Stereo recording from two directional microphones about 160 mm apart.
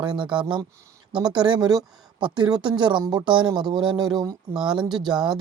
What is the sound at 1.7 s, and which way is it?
Speech, 30° right (ahead or behind).